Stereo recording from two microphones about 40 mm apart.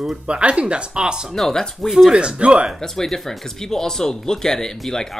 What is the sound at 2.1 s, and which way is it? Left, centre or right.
Speech, right.